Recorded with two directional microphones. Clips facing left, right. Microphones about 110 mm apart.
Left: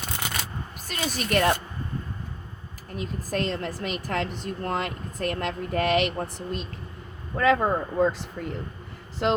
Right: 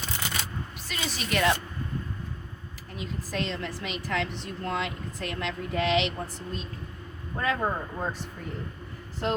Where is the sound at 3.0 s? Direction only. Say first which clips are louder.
Left 4 dB; 50° left (ahead or behind).